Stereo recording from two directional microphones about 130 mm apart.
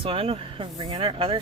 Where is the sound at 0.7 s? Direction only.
35° right (ahead or behind).